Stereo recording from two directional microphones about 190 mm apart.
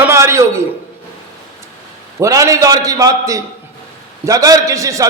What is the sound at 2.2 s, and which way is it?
A man's voice, 15° right (ahead or behind).